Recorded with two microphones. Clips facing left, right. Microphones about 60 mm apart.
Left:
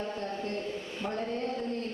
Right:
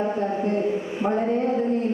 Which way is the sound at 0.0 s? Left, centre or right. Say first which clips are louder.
Right 11 dB; right.